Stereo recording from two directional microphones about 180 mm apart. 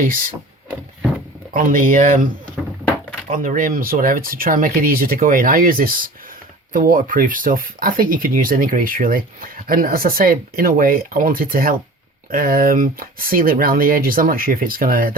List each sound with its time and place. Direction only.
0.0 s speech: 50° right (ahead or behind)
1.5 s speech: 50° right (ahead or behind)